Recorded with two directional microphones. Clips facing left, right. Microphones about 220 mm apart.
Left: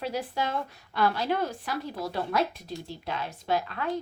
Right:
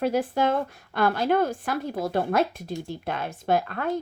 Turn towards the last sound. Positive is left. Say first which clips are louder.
# right 4 dB
turn(degrees=-50)  # may be behind; listen again after turning